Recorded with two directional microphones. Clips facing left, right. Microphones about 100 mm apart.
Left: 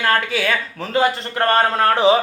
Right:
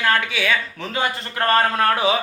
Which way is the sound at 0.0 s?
40° left (ahead or behind).